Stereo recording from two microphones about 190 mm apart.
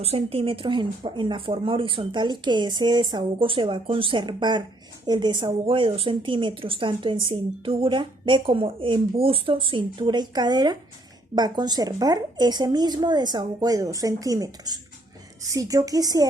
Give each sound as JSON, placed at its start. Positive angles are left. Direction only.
{"t": 0.0, "sound": "speech", "side_deg": -30}